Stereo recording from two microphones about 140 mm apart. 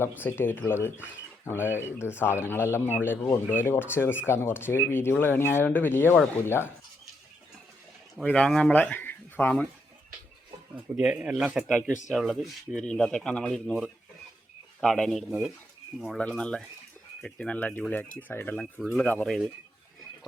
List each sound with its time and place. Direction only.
0.2 s speech: 15° left (ahead or behind)
8.2 s speech: 5° left (ahead or behind)
10.9 s speech: 10° right (ahead or behind)